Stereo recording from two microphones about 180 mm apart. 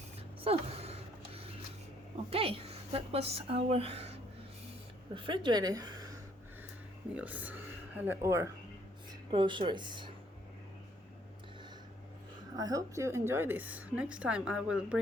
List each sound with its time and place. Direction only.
0.4 s a sound: 35° right (ahead or behind)
2.3 s a woman's voice: 30° right (ahead or behind)
5.1 s a woman's voice: 25° right (ahead or behind)
7.1 s speech: 10° right (ahead or behind)
9.3 s speech: 25° right (ahead or behind)
12.5 s a woman's voice: 20° right (ahead or behind)